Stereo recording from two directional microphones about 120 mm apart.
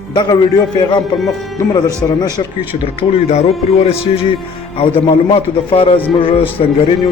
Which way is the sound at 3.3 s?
65° left (ahead or behind).